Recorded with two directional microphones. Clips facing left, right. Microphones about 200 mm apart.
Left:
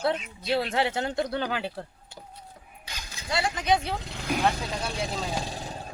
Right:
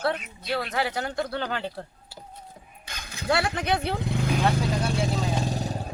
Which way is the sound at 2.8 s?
55° right (ahead or behind).